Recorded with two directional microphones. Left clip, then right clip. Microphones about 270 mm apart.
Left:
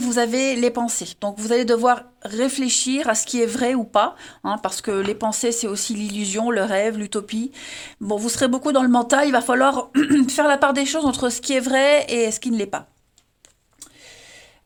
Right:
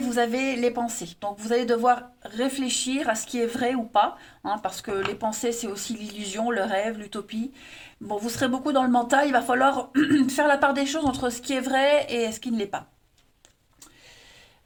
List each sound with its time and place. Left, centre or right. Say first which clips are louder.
0.0 s speech: left 4 dB; left